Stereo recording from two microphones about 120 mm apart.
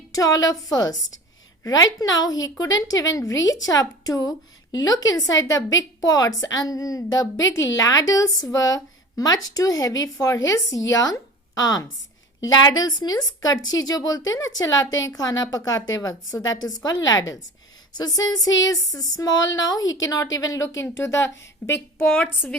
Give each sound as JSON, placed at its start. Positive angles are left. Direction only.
{"t": 0.1, "sound": "a woman's voice", "side_deg": 30}
{"t": 17.9, "sound": "a woman's voice", "side_deg": 30}
{"t": 22.0, "sound": "a woman's voice", "side_deg": 5}